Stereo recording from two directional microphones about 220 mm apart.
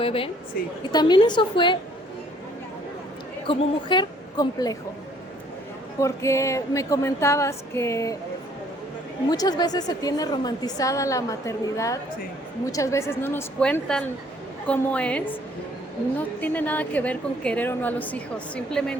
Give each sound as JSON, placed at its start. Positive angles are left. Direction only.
{"t": 0.0, "sound": "a woman's voice", "side_deg": 25}
{"t": 3.4, "sound": "a woman's voice", "side_deg": 20}
{"t": 6.0, "sound": "a woman's voice", "side_deg": 15}
{"t": 9.3, "sound": "a woman's voice", "side_deg": 20}
{"t": 16.4, "sound": "a woman's voice", "side_deg": 5}